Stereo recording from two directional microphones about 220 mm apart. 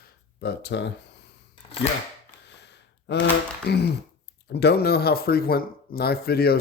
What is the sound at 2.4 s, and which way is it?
Gasp, 50° left (ahead or behind).